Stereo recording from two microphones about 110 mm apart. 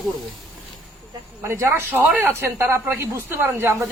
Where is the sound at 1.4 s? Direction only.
20° right (ahead or behind).